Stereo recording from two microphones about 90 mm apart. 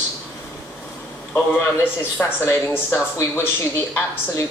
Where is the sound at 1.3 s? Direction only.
15° left (ahead or behind).